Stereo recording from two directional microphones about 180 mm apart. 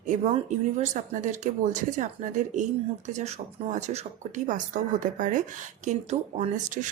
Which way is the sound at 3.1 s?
40° right (ahead or behind).